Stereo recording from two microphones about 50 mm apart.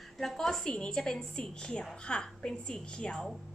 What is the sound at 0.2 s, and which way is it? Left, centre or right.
A woman's voice, centre.